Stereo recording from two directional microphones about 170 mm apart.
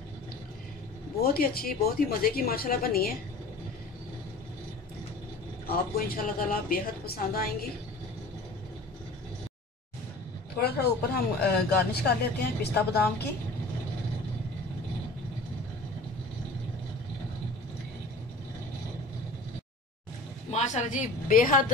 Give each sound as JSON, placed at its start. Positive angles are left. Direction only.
{"t": 1.2, "sound": "a woman's voice", "side_deg": 60}
{"t": 5.7, "sound": "a woman's voice", "side_deg": 60}
{"t": 10.6, "sound": "speech", "side_deg": 70}
{"t": 20.5, "sound": "a woman's voice", "side_deg": 45}